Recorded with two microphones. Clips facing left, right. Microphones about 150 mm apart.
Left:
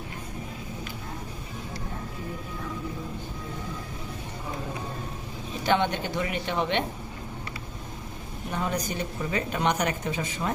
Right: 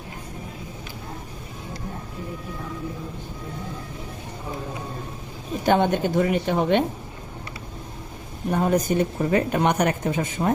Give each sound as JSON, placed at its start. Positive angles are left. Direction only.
{"t": 5.6, "sound": "a woman's voice", "side_deg": -45}
{"t": 8.4, "sound": "a woman's voice", "side_deg": -45}